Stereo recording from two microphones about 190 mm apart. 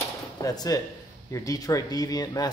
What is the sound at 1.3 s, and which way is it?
Speech, 15° left (ahead or behind).